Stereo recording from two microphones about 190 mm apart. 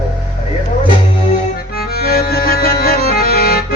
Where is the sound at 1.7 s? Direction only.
55° left (ahead or behind).